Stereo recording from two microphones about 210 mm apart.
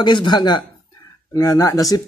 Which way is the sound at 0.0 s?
20° left (ahead or behind).